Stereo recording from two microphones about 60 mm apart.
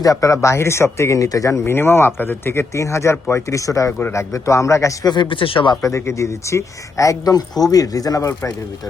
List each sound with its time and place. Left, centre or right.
0.0 s speech: left
1.7 s speech: left